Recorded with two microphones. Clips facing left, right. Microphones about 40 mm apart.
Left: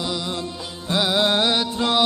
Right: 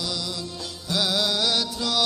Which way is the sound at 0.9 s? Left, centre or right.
Left.